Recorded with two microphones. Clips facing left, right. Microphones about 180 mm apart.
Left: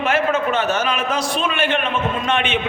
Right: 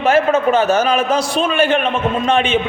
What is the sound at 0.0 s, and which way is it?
A man's voice, 40° right (ahead or behind).